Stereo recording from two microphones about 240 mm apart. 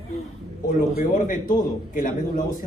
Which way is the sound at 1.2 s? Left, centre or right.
Left.